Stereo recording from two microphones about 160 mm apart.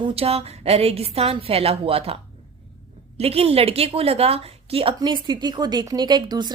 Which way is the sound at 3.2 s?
40° right (ahead or behind).